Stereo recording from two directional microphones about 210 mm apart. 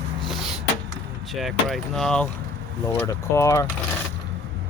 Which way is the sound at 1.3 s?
Centre (ahead or behind).